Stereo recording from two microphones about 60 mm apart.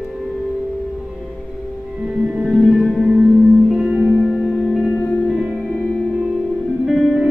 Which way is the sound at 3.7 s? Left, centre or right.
Centre.